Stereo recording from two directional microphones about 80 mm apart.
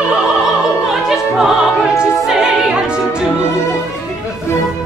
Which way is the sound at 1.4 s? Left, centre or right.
Centre.